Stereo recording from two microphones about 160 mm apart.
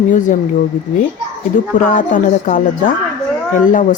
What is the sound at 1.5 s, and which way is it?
A woman's voice, 55° left (ahead or behind).